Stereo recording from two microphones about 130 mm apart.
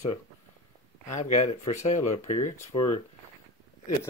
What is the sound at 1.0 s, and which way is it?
Speech, 65° left (ahead or behind).